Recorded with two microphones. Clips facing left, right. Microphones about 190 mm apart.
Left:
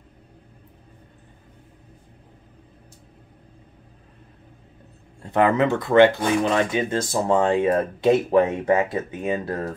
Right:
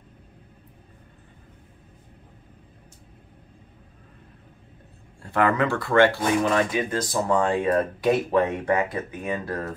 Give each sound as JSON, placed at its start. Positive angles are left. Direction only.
{"t": 5.2, "sound": "speech", "side_deg": 20}